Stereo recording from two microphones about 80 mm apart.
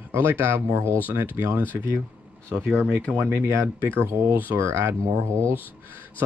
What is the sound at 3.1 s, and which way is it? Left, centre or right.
Speech, right.